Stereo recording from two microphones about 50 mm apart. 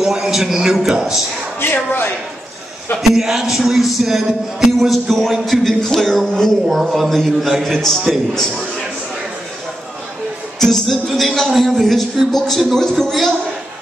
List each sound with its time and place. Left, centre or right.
0.0 s a man's voice: centre
1.6 s speech: left
3.0 s speech: centre
10.6 s speech: centre